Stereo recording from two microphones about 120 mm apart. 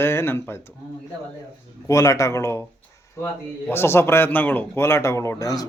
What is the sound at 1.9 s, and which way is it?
Speech, 25° left (ahead or behind).